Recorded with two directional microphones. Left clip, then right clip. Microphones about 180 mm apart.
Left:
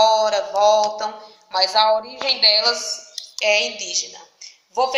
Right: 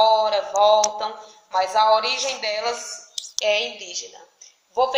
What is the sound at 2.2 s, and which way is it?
Speech, 10° left (ahead or behind).